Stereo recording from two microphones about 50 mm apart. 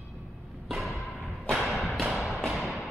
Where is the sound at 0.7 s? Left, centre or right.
Centre.